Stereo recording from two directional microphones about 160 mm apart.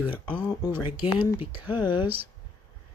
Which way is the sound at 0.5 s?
25° left (ahead or behind).